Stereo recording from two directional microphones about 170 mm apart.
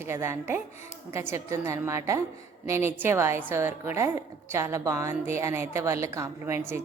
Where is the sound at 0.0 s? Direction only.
15° right (ahead or behind).